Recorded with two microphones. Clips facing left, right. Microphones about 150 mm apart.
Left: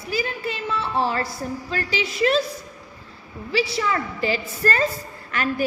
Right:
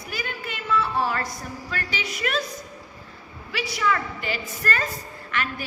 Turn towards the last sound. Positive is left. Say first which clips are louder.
# left 6 dB
turn(degrees=40)  # may be behind; listen again after turning